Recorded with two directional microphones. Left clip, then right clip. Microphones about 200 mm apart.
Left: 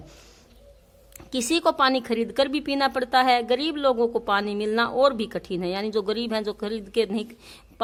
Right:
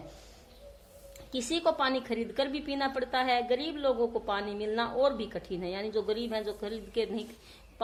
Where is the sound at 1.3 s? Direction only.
40° left (ahead or behind).